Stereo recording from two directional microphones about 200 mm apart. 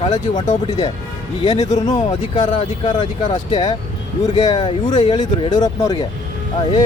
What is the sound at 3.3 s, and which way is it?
Speech, 35° left (ahead or behind).